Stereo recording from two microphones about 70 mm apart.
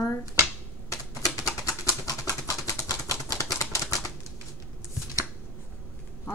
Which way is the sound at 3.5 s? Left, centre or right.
Left.